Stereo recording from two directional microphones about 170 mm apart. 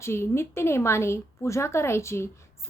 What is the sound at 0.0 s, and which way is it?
A woman's voice, 15° left (ahead or behind).